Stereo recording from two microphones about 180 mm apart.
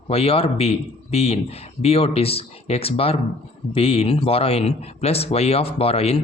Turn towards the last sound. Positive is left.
turn(degrees=35)  # may be behind; listen again after turning